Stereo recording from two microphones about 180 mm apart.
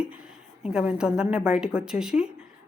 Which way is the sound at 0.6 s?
5° right (ahead or behind).